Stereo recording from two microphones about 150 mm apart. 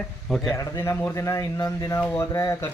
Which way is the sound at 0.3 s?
Centre (ahead or behind).